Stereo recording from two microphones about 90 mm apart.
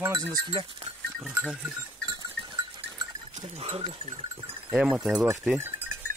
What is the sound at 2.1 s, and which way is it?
Sheep, 55° right (ahead or behind).